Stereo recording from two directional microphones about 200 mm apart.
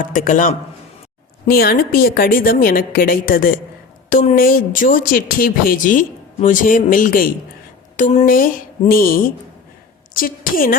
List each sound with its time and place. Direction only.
0.0 s speech: 40° left (ahead or behind)